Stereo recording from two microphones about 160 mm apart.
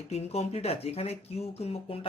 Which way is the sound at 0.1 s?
40° left (ahead or behind).